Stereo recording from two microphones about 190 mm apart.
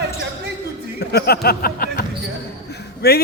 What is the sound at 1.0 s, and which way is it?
Speech, 55° left (ahead or behind).